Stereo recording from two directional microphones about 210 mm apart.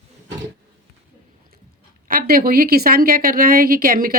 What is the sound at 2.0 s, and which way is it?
A woman's voice, 45° right (ahead or behind).